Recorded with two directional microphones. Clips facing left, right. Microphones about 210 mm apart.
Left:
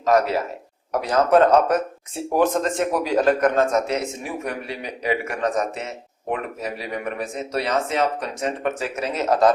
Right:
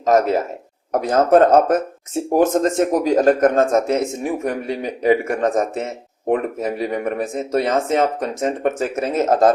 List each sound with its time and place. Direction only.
1.0 s a man's voice: 45° right (ahead or behind)